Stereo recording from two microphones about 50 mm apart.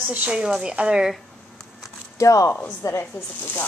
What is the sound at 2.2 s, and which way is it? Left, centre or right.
Speech, left.